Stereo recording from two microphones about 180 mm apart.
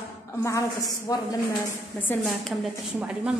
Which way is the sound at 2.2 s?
Centre (ahead or behind).